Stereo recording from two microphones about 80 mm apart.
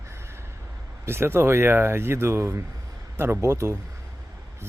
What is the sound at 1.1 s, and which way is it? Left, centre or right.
Speech, right.